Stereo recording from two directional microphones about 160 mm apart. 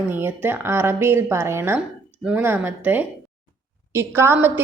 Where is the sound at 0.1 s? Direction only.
15° right (ahead or behind).